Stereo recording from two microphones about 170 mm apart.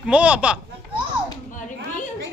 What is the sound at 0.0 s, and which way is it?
Speech, 5° right (ahead or behind).